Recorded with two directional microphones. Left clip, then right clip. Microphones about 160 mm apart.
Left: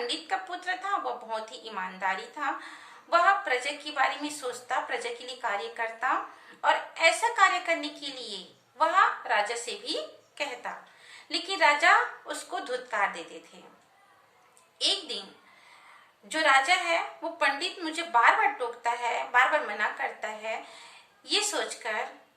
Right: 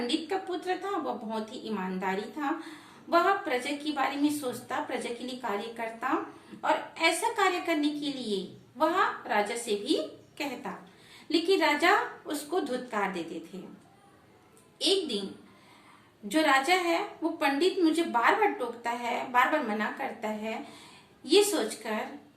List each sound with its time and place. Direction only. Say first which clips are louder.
0.1 s a woman's voice: right 1 dB; 15° left (ahead or behind)
14.8 s a woman's voice: right 1 dB; 15° left (ahead or behind)
16.3 s a woman's voice: left 2 dB; 15° left (ahead or behind)